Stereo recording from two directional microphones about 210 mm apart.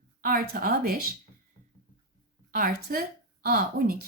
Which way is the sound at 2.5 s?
45° right (ahead or behind).